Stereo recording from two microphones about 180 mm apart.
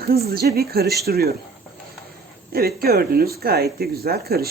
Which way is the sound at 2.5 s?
60° right (ahead or behind).